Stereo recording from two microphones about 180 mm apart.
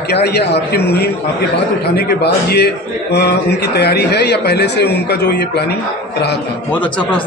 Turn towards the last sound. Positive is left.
turn(degrees=10)  # may be behind; listen again after turning